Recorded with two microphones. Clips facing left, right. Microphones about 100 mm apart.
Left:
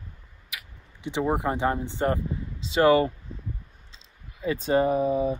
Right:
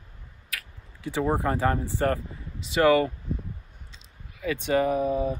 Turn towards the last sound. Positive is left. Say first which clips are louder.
# left 1 dB
turn(degrees=25)  # may be behind; listen again after turning